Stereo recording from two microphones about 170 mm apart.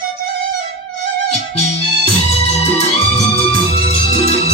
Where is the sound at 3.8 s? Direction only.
35° left (ahead or behind).